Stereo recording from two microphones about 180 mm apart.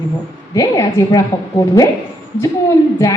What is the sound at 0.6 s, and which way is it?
Speech, 20° left (ahead or behind).